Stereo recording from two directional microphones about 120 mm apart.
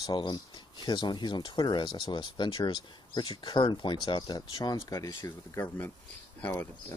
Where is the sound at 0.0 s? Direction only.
40° left (ahead or behind).